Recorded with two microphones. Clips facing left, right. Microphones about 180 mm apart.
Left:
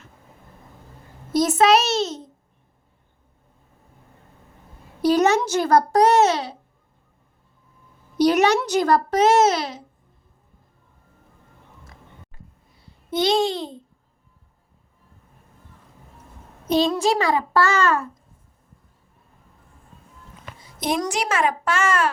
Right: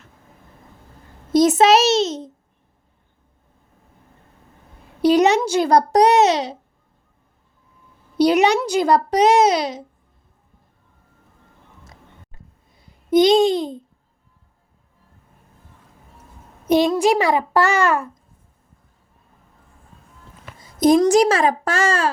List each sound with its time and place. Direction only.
1.3 s a sound: 20° right (ahead or behind)
5.0 s a child's voice: 15° right (ahead or behind)
8.2 s a child's voice: 10° right (ahead or behind)
11.9 s babbling: 20° right (ahead or behind)
16.6 s a woman's voice: 15° right (ahead or behind)
20.7 s a woman's voice: 40° right (ahead or behind)